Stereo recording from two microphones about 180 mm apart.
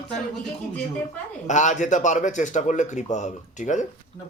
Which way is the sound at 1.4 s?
40° left (ahead or behind).